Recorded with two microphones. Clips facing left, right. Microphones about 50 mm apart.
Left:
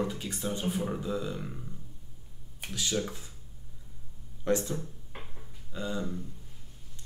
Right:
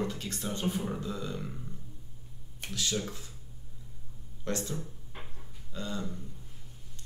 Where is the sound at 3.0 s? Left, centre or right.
Centre.